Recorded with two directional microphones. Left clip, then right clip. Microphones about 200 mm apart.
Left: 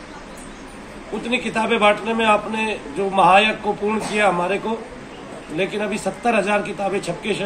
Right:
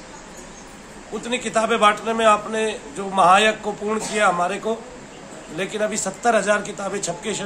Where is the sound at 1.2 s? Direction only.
15° right (ahead or behind).